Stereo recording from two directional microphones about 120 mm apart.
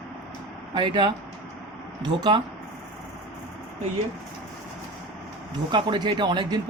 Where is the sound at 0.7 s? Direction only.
40° right (ahead or behind).